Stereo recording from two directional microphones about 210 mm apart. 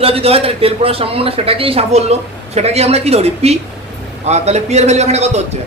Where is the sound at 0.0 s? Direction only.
30° right (ahead or behind).